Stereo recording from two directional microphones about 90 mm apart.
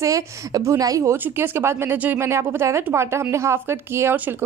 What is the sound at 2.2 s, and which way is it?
A woman's voice, 30° right (ahead or behind).